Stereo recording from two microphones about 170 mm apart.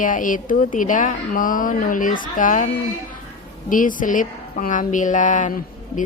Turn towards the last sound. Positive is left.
turn(degrees=50)  # may be behind; listen again after turning